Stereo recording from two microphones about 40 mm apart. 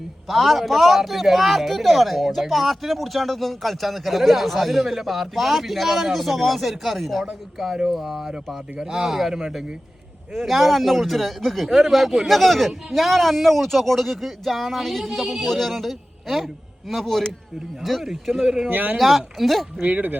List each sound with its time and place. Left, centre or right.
0.3 s a man's voice: centre
10.3 s a man's voice: centre
18.7 s speech: right
18.9 s a man's voice: centre
19.8 s speech: right